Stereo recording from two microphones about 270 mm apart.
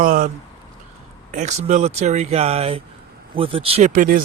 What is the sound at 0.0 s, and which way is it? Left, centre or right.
Speech, right.